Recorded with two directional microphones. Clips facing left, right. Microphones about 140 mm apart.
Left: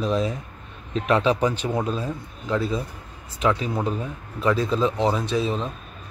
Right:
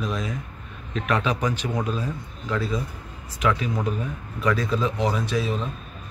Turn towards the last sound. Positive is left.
turn(degrees=30)  # may be behind; listen again after turning